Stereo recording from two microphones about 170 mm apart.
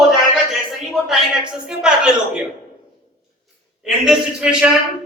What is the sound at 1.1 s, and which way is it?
A man's voice, 5° right (ahead or behind).